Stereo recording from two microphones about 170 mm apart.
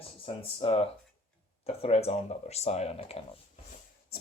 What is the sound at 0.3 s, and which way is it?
Speech, 30° left (ahead or behind).